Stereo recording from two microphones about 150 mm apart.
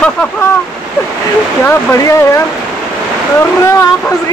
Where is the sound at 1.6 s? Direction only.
15° left (ahead or behind).